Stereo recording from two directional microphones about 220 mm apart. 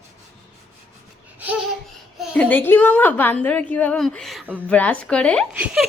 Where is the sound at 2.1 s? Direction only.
Centre (ahead or behind).